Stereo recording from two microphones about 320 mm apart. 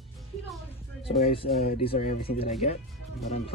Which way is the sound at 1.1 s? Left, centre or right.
Centre.